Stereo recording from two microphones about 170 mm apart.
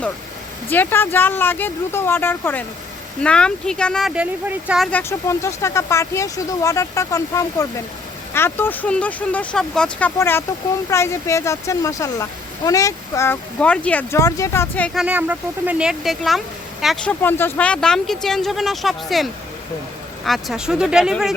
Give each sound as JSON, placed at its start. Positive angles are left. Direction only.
{"t": 0.7, "sound": "speech", "side_deg": 10}
{"t": 4.9, "sound": "speech", "side_deg": 10}
{"t": 14.9, "sound": "speech", "side_deg": -10}